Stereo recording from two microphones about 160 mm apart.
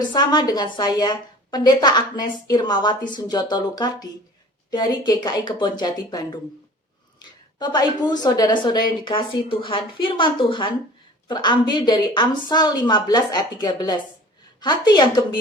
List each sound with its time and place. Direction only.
0.1 s a woman's voice: 25° left (ahead or behind)